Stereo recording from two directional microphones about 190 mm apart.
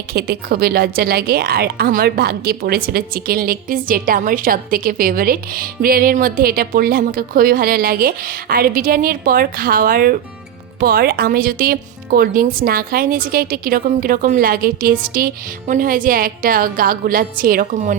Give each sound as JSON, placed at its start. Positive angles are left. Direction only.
{"t": 0.1, "sound": "a woman's voice", "side_deg": -55}